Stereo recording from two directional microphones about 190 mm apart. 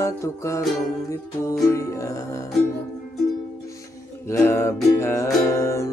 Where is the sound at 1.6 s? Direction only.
15° left (ahead or behind).